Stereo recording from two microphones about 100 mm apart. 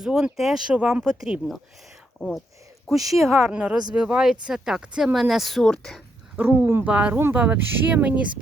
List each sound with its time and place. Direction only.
0.0 s speech: 5° right (ahead or behind)
3.1 s speech: centre (ahead or behind)
3.5 s speech: 10° right (ahead or behind); by 6.0 s 5° left (ahead or behind)
6.3 s speech: 15° right (ahead or behind)